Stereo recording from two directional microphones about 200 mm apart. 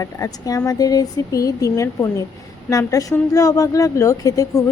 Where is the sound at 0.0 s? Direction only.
20° left (ahead or behind).